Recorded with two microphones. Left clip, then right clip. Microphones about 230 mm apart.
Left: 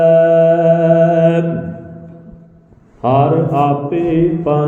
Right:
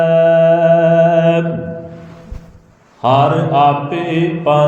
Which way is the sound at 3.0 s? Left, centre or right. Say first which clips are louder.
Right 1 dB; right.